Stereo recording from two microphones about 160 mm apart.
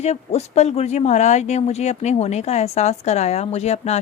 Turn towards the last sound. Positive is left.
turn(degrees=40)  # may be behind; listen again after turning